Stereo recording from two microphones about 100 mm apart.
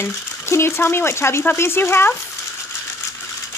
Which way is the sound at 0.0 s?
25° left (ahead or behind).